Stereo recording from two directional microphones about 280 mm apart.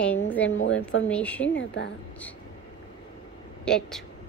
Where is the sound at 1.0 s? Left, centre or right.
Centre.